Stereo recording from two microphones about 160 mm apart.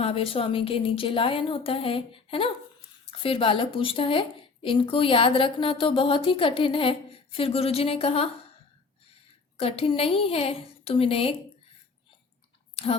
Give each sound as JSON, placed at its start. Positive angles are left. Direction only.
{"t": 0.0, "sound": "speech", "side_deg": 35}
{"t": 9.6, "sound": "speech", "side_deg": 35}
{"t": 12.7, "sound": "chewing", "side_deg": 35}